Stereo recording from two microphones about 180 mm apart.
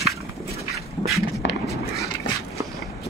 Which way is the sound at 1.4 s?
90° left.